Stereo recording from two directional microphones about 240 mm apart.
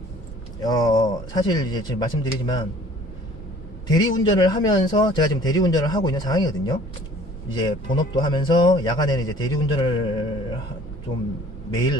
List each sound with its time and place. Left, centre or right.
0.6 s a man's voice: centre
3.8 s a man's voice: centre